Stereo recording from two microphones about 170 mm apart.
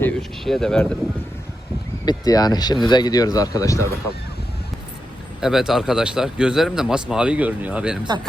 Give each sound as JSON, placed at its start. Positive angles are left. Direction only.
{"t": 0.0, "sound": "speech", "side_deg": 0}
{"t": 2.0, "sound": "speech", "side_deg": 20}
{"t": 5.4, "sound": "speech", "side_deg": 0}
{"t": 8.0, "sound": "speech", "side_deg": -25}